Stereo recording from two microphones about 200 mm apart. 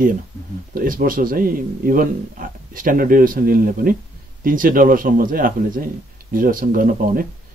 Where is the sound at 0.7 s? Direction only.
45° right (ahead or behind).